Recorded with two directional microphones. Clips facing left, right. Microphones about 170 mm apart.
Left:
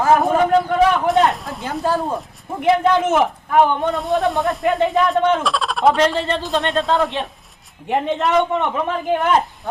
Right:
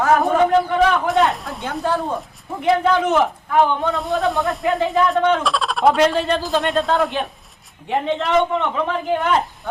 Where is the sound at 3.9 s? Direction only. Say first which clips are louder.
Left 1 dB; centre (ahead or behind).